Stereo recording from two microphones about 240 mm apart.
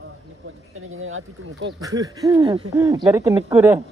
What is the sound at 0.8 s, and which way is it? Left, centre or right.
Speech, right.